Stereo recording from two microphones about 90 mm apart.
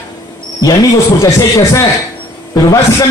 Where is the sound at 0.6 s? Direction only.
40° left (ahead or behind).